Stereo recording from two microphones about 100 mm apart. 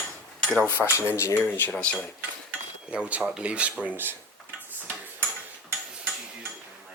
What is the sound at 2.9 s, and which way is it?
Speech, 10° right (ahead or behind).